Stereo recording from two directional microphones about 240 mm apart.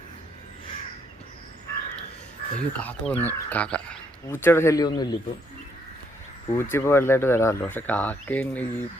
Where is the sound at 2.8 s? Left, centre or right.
Centre.